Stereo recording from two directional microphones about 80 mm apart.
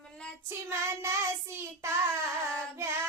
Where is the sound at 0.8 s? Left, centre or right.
Right.